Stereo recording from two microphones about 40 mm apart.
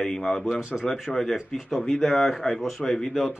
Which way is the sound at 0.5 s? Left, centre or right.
Right.